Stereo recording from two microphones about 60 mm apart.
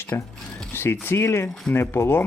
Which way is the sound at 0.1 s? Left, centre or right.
Left.